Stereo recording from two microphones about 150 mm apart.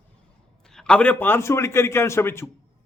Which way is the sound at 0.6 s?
5° left (ahead or behind).